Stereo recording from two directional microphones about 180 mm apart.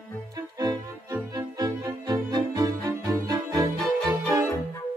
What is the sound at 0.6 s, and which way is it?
Music, 20° right (ahead or behind).